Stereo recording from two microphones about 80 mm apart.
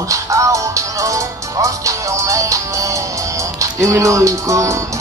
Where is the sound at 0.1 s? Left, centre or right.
Right.